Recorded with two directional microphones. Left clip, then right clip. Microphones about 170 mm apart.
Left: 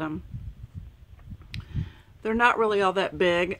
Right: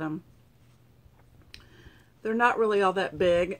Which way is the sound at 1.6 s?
40° left (ahead or behind).